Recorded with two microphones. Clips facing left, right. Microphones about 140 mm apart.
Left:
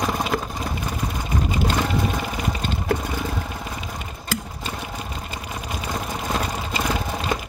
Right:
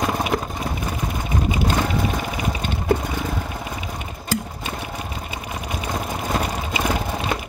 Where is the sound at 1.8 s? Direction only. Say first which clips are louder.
Right 1 dB; 10° right (ahead or behind).